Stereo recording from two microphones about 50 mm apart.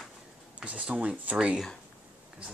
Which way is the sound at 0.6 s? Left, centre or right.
Right.